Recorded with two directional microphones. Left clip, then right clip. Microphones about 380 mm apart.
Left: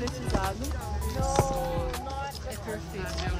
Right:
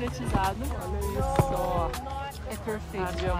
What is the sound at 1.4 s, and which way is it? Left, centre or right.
Music, left.